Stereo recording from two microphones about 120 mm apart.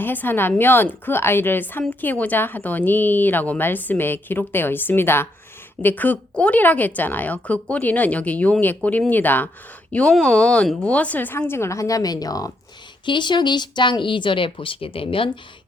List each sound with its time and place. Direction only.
0.0 s speech: 15° left (ahead or behind); by 15.4 s 45° left (ahead or behind)